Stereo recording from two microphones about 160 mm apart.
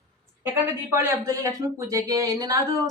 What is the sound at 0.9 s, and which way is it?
Speech, 15° right (ahead or behind).